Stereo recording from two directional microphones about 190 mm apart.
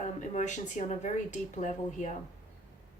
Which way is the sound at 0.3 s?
40° left (ahead or behind).